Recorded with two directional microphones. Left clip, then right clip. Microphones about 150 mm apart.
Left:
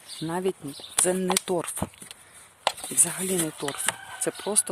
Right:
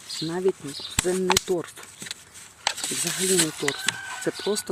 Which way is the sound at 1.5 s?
40° left (ahead or behind).